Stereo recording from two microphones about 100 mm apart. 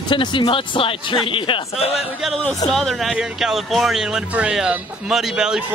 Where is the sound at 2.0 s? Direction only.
5° right (ahead or behind).